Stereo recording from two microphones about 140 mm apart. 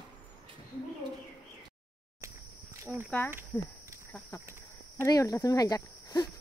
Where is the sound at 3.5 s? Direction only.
15° left (ahead or behind).